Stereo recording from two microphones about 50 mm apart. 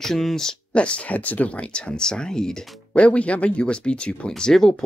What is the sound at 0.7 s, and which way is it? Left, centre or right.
Speech, left.